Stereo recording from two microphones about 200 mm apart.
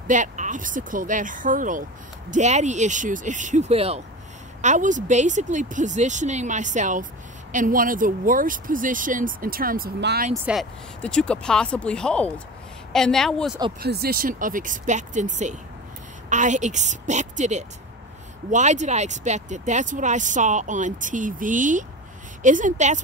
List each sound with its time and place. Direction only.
0.1 s speech: 40° right (ahead or behind)
10.3 s speech: 5° right (ahead or behind)
13.7 s speech: 50° right (ahead or behind)